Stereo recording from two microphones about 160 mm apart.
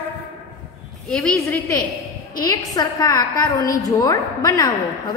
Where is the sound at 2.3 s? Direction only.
25° left (ahead or behind).